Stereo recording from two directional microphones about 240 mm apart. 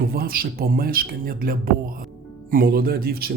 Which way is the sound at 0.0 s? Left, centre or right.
Right.